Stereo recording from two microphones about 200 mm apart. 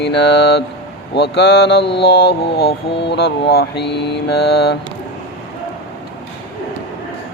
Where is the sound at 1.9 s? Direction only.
55° left (ahead or behind).